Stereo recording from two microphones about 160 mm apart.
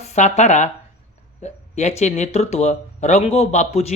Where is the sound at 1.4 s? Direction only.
45° left (ahead or behind).